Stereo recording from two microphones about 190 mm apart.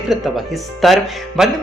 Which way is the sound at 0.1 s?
Centre (ahead or behind).